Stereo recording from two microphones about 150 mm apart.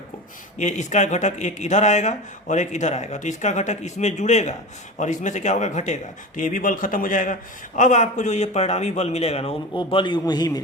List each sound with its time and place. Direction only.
0.6 s speech: 50° left (ahead or behind); by 10.6 s 25° left (ahead or behind)